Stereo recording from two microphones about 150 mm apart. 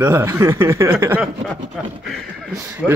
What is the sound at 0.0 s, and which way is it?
Speech, 15° right (ahead or behind).